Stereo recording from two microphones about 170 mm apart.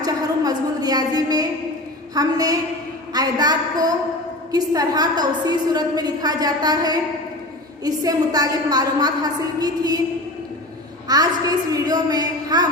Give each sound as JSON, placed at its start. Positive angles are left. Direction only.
{"t": 0.0, "sound": "a sound", "side_deg": -20}
{"t": 2.1, "sound": "a woman's voice", "side_deg": -20}
{"t": 11.1, "sound": "a woman's voice", "side_deg": -20}